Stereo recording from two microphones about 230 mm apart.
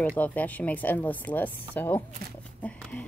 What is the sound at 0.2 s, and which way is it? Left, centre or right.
A woman's voice, centre.